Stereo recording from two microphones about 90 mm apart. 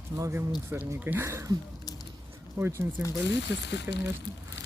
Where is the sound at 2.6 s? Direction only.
25° right (ahead or behind).